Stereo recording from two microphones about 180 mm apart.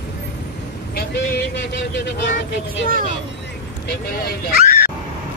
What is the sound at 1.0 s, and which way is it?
Vehicle, 65° left (ahead or behind).